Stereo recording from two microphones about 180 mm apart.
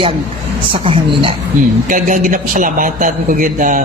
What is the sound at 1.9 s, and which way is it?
A man's voice, 45° right (ahead or behind).